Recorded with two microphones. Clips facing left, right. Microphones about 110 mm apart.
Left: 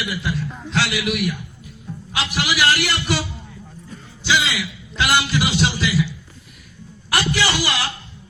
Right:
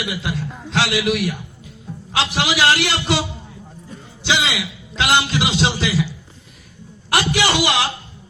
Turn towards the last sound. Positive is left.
turn(degrees=-20)  # may be behind; listen again after turning